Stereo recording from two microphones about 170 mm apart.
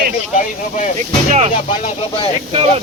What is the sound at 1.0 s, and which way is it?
Speech, 40° right (ahead or behind).